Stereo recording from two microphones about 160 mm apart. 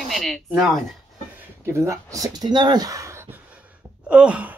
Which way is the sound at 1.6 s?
15° right (ahead or behind).